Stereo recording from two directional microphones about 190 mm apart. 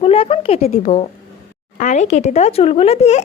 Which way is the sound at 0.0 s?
30° left (ahead or behind).